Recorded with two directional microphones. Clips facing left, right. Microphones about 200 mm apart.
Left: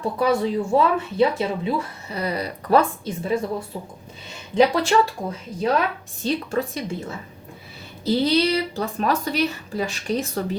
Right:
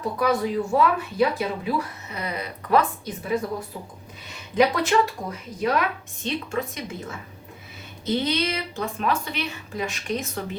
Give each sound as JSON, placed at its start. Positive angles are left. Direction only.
{"t": 0.2, "sound": "speech", "side_deg": 30}
{"t": 4.5, "sound": "a woman's voice", "side_deg": 30}